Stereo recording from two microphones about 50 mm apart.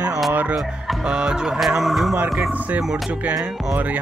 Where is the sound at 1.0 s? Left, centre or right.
Centre.